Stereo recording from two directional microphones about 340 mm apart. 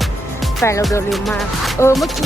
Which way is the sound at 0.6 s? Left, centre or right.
Centre.